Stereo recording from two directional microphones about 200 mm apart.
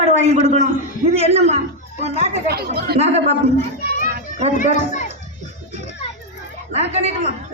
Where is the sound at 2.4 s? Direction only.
50° right (ahead or behind).